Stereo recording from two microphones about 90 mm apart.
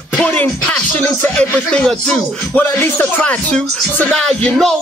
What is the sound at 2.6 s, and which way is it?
Music, 20° left (ahead or behind).